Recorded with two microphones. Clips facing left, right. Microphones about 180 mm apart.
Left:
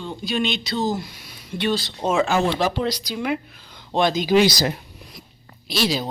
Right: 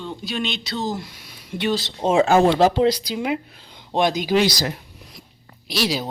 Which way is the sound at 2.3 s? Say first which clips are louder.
Right 5 dB; 50° right (ahead or behind).